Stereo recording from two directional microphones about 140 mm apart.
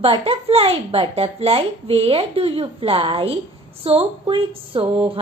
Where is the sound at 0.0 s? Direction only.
45° right (ahead or behind).